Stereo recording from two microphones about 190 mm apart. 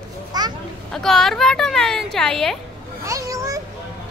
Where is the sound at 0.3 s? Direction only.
20° right (ahead or behind).